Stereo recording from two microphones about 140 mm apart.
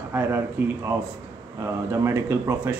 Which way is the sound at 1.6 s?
20° right (ahead or behind).